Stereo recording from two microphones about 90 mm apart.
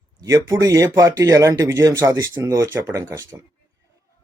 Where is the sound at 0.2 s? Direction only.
40° right (ahead or behind).